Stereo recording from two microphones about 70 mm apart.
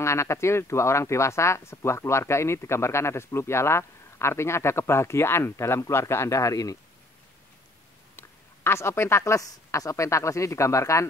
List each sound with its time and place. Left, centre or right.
0.0 s speech: left
8.2 s a woman's voice: left